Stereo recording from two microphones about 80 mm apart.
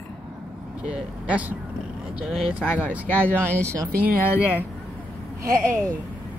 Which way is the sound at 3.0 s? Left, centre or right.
Left.